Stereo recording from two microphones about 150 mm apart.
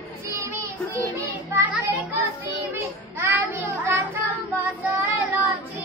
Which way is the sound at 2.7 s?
15° right (ahead or behind).